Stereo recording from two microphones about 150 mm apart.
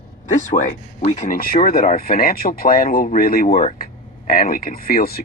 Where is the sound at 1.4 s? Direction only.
75° left (ahead or behind).